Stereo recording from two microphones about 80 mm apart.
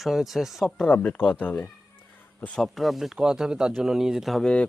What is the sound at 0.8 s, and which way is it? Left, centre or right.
Speech, centre.